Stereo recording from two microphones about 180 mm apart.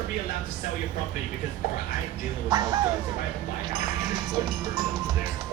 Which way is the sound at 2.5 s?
20° right (ahead or behind).